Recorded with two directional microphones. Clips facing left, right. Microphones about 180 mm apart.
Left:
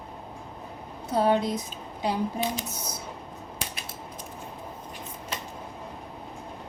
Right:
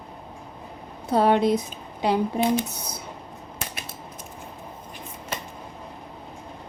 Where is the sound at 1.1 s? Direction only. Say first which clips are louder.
Right 4 dB; 70° right (ahead or behind).